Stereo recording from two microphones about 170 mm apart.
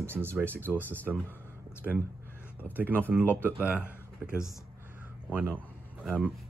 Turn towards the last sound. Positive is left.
turn(degrees=-10)  # may be behind; listen again after turning